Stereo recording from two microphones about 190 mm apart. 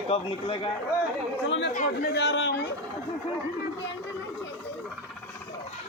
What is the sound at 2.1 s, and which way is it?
Speech, 65° left (ahead or behind).